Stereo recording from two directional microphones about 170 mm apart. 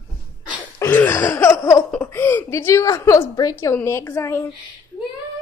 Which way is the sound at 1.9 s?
10° left (ahead or behind).